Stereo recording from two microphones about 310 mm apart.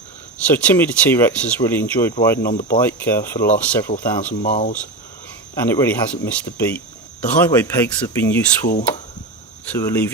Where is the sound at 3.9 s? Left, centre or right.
Left.